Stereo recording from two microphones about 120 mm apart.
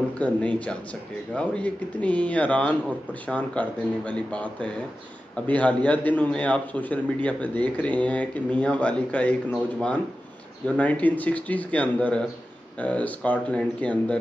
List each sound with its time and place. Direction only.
0.2 s speech: 10° left (ahead or behind)
10.8 s speech: 10° left (ahead or behind)